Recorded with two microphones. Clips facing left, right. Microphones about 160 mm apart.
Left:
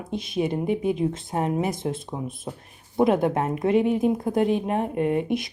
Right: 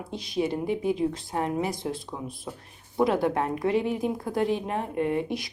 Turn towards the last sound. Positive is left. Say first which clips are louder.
# left 3 dB
turn(degrees=20)  # may be behind; listen again after turning